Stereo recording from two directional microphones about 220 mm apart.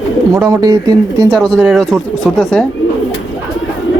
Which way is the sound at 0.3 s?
15° right (ahead or behind).